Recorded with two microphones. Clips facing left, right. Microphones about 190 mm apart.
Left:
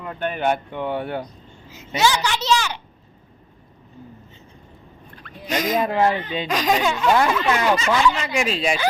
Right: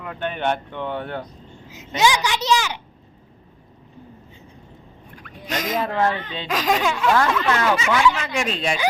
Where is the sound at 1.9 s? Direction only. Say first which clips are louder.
Right 1 dB; 15° right (ahead or behind).